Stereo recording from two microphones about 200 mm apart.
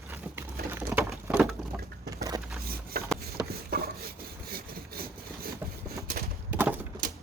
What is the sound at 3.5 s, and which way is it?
Wood, 50° right (ahead or behind).